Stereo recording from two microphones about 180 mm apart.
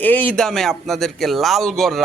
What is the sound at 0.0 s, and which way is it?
A man's voice, 10° left (ahead or behind).